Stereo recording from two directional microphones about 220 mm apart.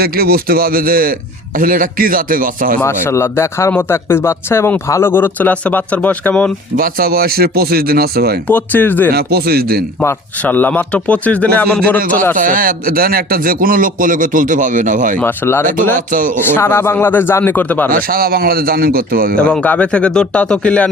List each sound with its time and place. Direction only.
0.0 s a man's voice: 45° right (ahead or behind)
2.8 s speech: 10° left (ahead or behind)
6.7 s speech: 40° right (ahead or behind)
8.4 s speech: 10° left (ahead or behind)
9.1 s speech: 45° right (ahead or behind)
10.0 s speech: 10° left (ahead or behind)
11.9 s a man's voice: 40° right (ahead or behind)
15.2 s speech: 10° left (ahead or behind)
15.6 s a man's voice: 35° right (ahead or behind)
16.6 s speech: 10° left (ahead or behind)
17.9 s speech: 40° right (ahead or behind)
19.4 s speech: 5° left (ahead or behind)